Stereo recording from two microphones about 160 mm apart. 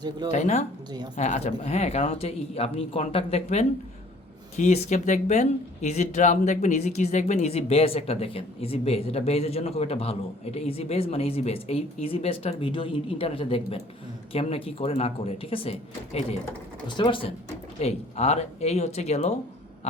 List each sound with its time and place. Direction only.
0.3 s speech: 45° left (ahead or behind)
0.9 s a woman's voice: 25° right (ahead or behind)
1.1 s speech: 45° left (ahead or behind)
16.8 s speech: 30° left (ahead or behind)
17.7 s speech: 45° left (ahead or behind)
19.8 s a sound: 40° left (ahead or behind)